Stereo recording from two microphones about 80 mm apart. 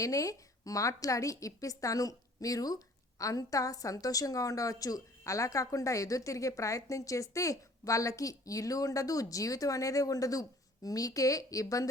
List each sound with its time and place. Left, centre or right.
0.0 s a woman's voice: left